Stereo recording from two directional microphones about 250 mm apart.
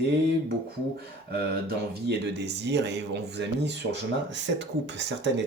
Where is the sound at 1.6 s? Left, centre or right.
Right.